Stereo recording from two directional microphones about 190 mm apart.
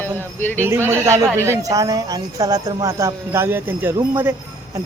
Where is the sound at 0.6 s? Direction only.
15° right (ahead or behind).